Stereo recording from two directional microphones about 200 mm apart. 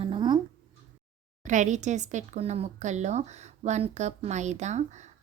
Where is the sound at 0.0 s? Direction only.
25° right (ahead or behind).